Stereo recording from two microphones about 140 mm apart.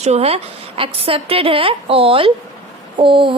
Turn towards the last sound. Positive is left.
turn(degrees=-35)  # may be behind; listen again after turning